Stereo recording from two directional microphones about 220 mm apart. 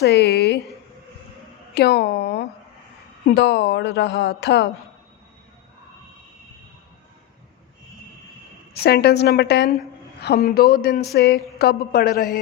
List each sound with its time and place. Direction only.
0.0 s speech: 50° left (ahead or behind)
1.7 s speech: 45° left (ahead or behind)
8.7 s speech: 45° left (ahead or behind)